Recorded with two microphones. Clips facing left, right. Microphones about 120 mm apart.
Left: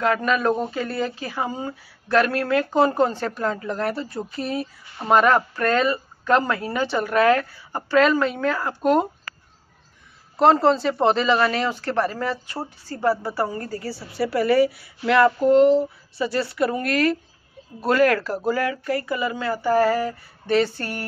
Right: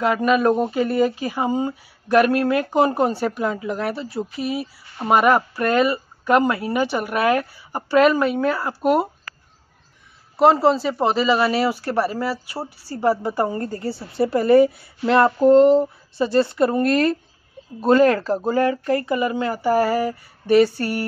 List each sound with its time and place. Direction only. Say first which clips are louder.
0.0 s speech: right 3 dB; 10° right (ahead or behind)
10.3 s speech: right 1 dB; 5° right (ahead or behind)